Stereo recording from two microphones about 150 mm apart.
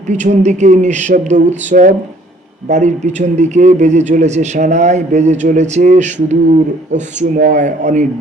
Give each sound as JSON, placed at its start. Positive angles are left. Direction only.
{"t": 0.1, "sound": "a man's voice", "side_deg": -50}